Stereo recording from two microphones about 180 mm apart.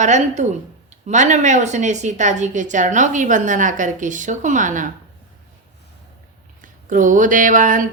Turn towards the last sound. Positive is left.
turn(degrees=-45)  # may be behind; listen again after turning